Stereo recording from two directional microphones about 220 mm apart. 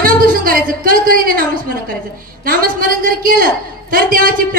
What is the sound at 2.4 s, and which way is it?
A woman's voice, 40° right (ahead or behind).